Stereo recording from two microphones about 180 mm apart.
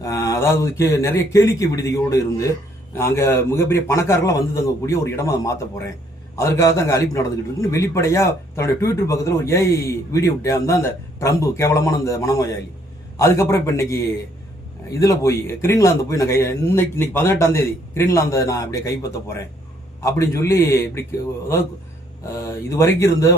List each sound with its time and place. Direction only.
0.0 s speech: 15° left (ahead or behind)
20.0 s speech: 15° left (ahead or behind)
22.7 s speech: 15° left (ahead or behind)